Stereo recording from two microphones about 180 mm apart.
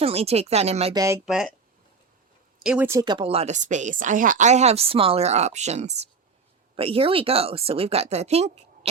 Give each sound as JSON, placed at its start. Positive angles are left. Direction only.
{"t": 0.0, "sound": "speech", "side_deg": -35}
{"t": 0.9, "sound": "speech", "side_deg": -15}
{"t": 1.2, "sound": "speech", "side_deg": -5}
{"t": 2.6, "sound": "speech", "side_deg": -10}